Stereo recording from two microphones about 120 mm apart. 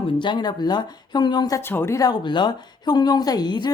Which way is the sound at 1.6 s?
20° left (ahead or behind).